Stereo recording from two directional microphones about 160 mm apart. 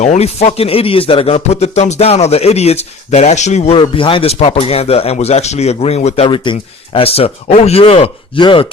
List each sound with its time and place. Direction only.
0.0 s speech: 45° left (ahead or behind)
3.8 s speech: 30° left (ahead or behind)